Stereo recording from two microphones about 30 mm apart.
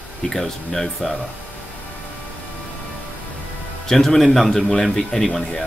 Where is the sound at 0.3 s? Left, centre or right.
Centre.